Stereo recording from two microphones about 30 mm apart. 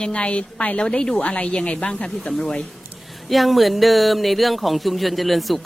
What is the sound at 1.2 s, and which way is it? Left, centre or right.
Speech, left.